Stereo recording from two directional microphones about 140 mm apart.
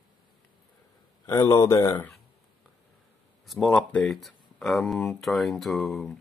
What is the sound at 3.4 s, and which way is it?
Speech, 5° left (ahead or behind).